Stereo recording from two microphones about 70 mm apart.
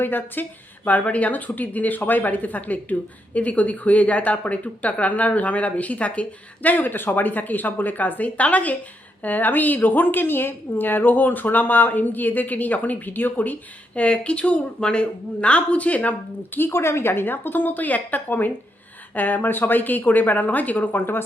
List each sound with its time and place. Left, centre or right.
0.0 s a woman's voice: left
16.6 s a woman's voice: left